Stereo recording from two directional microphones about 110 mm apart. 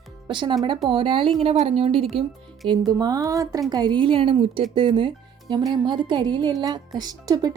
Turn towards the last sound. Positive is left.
turn(degrees=-35)  # may be behind; listen again after turning